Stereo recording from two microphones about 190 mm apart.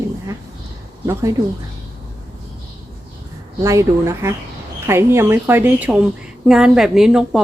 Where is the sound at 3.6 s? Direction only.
15° right (ahead or behind).